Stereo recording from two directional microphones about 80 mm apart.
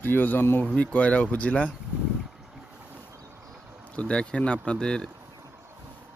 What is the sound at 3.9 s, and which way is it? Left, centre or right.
Speech, centre.